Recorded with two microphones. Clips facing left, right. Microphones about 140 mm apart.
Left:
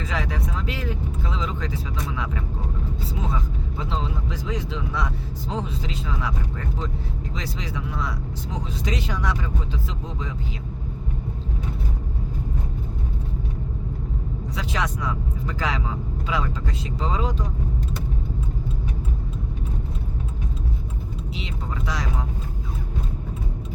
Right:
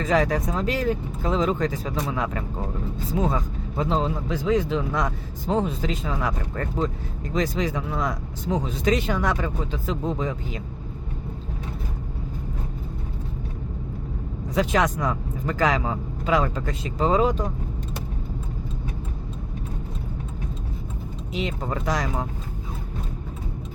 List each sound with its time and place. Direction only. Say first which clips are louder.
0.0 s speech: right 7 dB; 45° right (ahead or behind)
14.5 s speech: right 7 dB; 50° right (ahead or behind)
21.3 s speech: right 8 dB; 45° right (ahead or behind)